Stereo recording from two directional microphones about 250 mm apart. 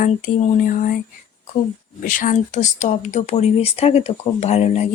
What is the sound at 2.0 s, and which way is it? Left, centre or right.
Speech, left.